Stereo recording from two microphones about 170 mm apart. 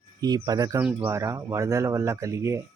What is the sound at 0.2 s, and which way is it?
Speech, 25° right (ahead or behind).